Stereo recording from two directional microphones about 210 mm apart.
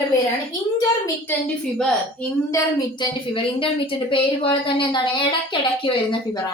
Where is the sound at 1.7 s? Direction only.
5° left (ahead or behind).